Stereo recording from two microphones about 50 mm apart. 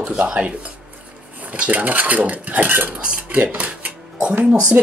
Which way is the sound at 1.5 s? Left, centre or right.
Right.